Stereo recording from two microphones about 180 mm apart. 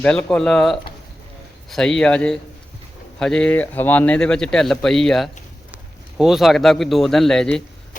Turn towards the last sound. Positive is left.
turn(degrees=5)  # may be behind; listen again after turning